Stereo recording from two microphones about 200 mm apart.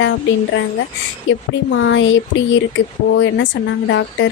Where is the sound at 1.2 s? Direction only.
70° left (ahead or behind).